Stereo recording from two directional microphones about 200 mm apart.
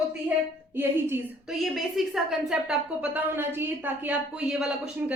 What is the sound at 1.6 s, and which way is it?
A woman's voice, centre (ahead or behind).